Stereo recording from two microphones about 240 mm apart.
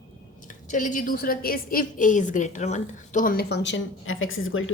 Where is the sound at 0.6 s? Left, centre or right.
Left.